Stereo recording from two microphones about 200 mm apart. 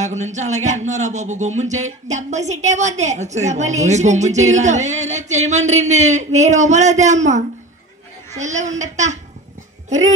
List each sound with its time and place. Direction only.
0.0 s a woman's voice: 35° right (ahead or behind)